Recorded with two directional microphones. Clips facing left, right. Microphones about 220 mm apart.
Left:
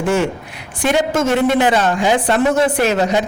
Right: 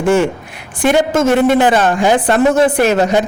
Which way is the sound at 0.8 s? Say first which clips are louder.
Right 4 dB; 50° right (ahead or behind).